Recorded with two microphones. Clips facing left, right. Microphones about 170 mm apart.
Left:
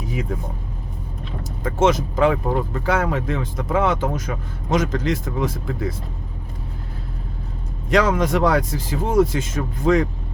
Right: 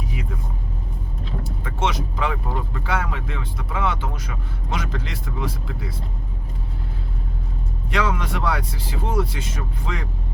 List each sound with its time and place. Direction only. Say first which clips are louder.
1.5 s speech: left 8 dB; 45° left (ahead or behind)
7.9 s speech: left 7 dB; 40° left (ahead or behind)